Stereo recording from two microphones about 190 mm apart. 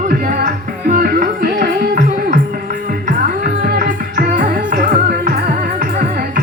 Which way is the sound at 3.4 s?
50° right (ahead or behind).